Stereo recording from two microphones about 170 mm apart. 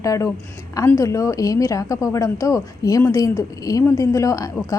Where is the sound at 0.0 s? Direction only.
20° left (ahead or behind).